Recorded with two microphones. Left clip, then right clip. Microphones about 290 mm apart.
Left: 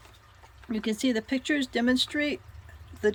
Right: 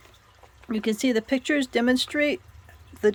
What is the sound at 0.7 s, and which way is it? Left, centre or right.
Speech, centre.